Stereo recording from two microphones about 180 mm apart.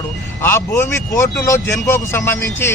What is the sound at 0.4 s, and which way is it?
Speech, 15° left (ahead or behind).